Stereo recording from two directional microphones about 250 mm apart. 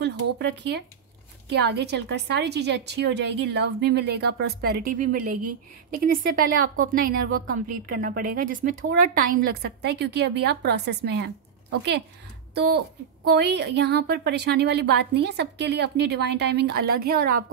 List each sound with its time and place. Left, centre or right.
0.0 s a woman's voice: right
12.5 s a woman's voice: right